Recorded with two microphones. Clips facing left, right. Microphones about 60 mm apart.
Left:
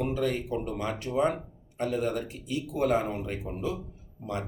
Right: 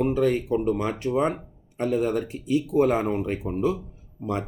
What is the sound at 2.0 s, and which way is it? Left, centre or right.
Speech, right.